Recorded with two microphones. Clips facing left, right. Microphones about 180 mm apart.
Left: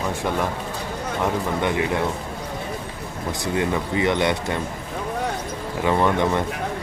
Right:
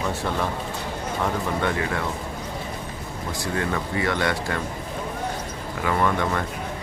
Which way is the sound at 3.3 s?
20° left (ahead or behind).